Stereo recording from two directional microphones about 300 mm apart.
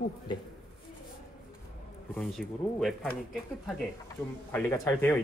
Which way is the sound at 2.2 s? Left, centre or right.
Centre.